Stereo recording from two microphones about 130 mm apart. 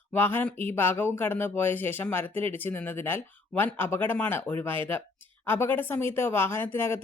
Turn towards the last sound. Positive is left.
turn(degrees=20)  # may be behind; listen again after turning